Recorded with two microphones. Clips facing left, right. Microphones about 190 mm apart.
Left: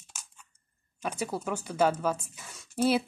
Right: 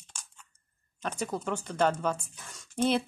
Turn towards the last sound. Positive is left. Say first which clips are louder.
# left 1 dB
turn(degrees=5)  # may be behind; listen again after turning